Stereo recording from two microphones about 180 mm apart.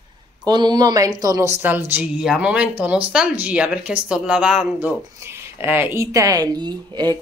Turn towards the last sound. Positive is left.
turn(degrees=-25)  # may be behind; listen again after turning